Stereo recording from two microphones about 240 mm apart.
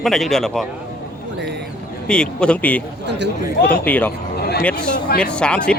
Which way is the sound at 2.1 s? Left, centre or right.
Centre.